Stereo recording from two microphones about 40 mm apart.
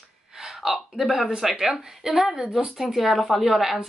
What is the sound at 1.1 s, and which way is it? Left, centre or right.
Speech, centre.